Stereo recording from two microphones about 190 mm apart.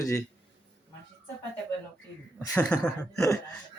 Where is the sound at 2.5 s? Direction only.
5° left (ahead or behind).